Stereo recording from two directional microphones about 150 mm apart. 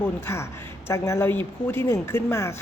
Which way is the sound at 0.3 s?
15° left (ahead or behind).